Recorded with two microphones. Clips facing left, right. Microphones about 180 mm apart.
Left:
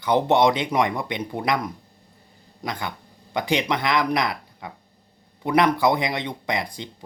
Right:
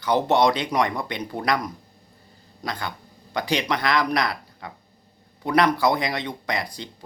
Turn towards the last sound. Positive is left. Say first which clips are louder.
# left 1 dB
turn(degrees=20)  # may be behind; listen again after turning